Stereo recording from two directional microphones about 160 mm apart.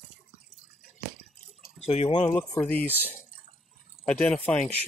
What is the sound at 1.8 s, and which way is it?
Speech, 40° left (ahead or behind).